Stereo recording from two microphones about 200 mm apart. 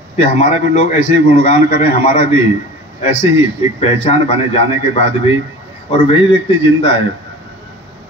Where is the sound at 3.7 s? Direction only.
30° left (ahead or behind).